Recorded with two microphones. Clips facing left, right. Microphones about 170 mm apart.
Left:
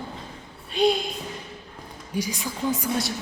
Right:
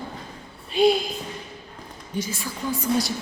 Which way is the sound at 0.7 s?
5° right (ahead or behind).